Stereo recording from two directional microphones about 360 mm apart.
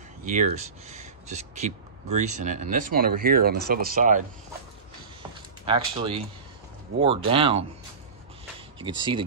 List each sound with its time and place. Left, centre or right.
0.2 s speech: right
5.7 s speech: centre
8.7 s speech: centre